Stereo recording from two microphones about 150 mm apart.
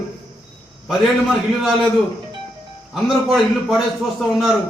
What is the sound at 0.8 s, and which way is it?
Speech, centre (ahead or behind).